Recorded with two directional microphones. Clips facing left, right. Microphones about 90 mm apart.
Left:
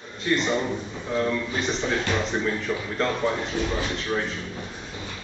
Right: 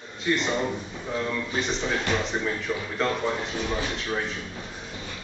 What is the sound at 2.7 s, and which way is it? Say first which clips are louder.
Speech: left 1 dB; 5° left (ahead or behind).